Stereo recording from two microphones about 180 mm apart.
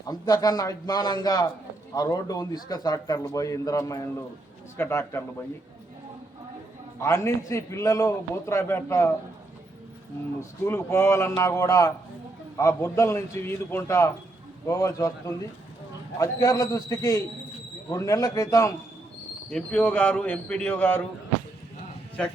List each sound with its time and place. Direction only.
0.1 s a man's voice: 20° left (ahead or behind)
7.0 s a man's voice: 15° left (ahead or behind)
10.6 s a man's voice: 15° left (ahead or behind)
16.1 s a man's voice: 20° left (ahead or behind)
19.5 s a man's voice: 5° left (ahead or behind)